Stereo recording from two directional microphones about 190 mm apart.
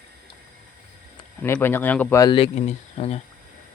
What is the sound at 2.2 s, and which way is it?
Speech, 25° left (ahead or behind).